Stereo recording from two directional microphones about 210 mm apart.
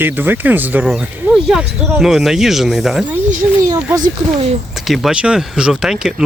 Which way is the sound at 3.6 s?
15° right (ahead or behind).